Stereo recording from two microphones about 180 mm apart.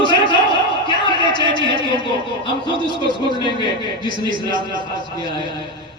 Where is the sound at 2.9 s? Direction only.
25° right (ahead or behind).